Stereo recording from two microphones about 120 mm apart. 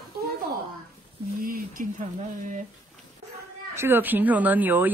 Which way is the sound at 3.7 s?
20° right (ahead or behind).